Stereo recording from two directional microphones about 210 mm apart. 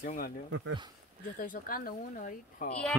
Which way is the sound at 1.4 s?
45° left (ahead or behind).